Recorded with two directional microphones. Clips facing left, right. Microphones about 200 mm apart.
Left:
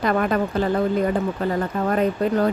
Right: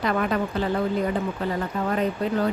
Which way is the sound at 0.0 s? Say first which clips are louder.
Left 3 dB; 45° left (ahead or behind).